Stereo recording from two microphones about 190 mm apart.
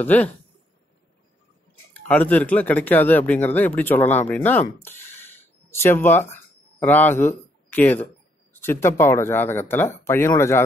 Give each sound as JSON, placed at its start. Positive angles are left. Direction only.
{"t": 0.0, "sound": "speech", "side_deg": 10}
{"t": 2.0, "sound": "speech", "side_deg": 10}